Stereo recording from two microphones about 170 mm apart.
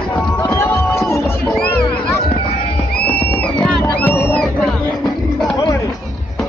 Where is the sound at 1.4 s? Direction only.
5° left (ahead or behind).